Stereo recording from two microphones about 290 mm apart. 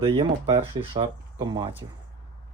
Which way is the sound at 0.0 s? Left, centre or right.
Centre.